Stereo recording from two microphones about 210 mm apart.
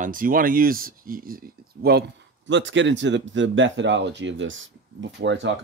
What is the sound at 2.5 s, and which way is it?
Speech, 60° right (ahead or behind).